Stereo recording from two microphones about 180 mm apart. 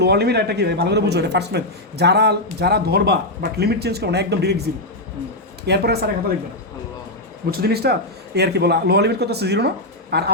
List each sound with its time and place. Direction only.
0.0 s speech: 65° right (ahead or behind)
5.6 s speech: 65° right (ahead or behind)
7.5 s speech: 60° right (ahead or behind)